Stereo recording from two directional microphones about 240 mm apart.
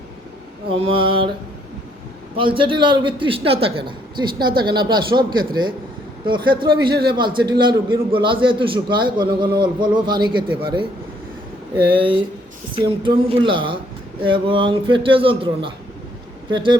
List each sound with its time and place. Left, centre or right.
0.8 s a man's voice: right
2.4 s a man's voice: right
11.9 s a man's voice: right